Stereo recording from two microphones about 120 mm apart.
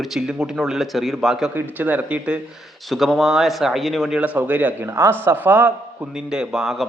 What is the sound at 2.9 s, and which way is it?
A man's voice, centre (ahead or behind).